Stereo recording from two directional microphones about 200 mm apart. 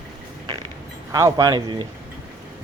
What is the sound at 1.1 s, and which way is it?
Speech, 15° right (ahead or behind).